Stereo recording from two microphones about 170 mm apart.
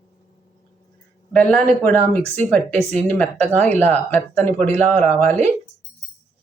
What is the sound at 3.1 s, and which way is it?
Speech, 10° left (ahead or behind).